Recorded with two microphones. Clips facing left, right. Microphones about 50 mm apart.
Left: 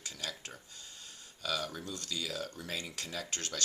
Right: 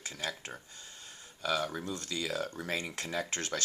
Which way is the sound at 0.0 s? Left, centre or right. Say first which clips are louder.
Right 4 dB; right.